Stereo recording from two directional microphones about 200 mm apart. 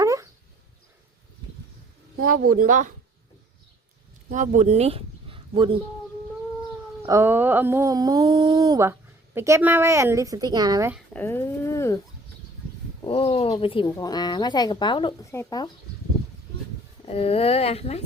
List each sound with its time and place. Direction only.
0.0 s dog: 15° right (ahead or behind)
2.2 s speech: 45° right (ahead or behind)
4.3 s speech: 40° right (ahead or behind)
7.0 s a sound: 10° right (ahead or behind)
10.9 s speech: 10° left (ahead or behind)
13.1 s speech: 30° left (ahead or behind)
17.1 s speech: 30° left (ahead or behind)